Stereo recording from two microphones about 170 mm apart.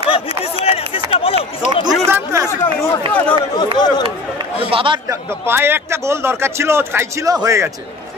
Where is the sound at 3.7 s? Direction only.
25° left (ahead or behind).